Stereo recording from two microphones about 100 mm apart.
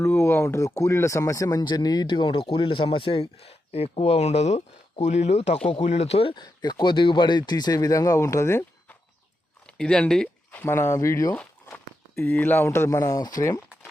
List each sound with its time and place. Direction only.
0.0 s speech: 25° left (ahead or behind); by 6.3 s 85° left
6.3 s speech: 45° left (ahead or behind); by 8.6 s 30° left (ahead or behind)
9.7 s speech: 10° left (ahead or behind)
10.5 s speech: 20° left (ahead or behind)
12.1 s speech: 20° left (ahead or behind); by 13.6 s 40° left (ahead or behind)